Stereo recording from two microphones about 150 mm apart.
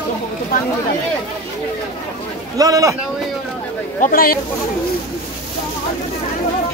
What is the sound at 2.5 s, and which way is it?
Speech, 25° right (ahead or behind).